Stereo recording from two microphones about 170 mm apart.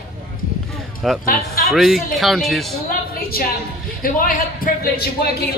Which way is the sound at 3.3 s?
60° left (ahead or behind).